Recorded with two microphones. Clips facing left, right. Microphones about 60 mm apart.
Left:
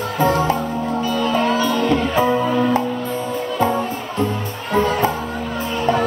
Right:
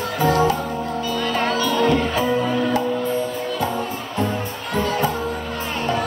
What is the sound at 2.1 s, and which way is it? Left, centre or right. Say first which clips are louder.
Music: left 3 dB; left.